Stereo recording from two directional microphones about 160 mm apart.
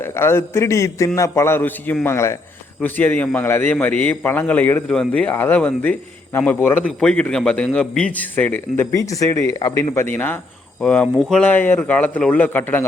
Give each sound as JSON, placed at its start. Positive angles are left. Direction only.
{"t": 0.0, "sound": "a man's voice", "side_deg": 15}